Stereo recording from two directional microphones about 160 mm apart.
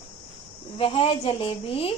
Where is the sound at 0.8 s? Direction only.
35° left (ahead or behind).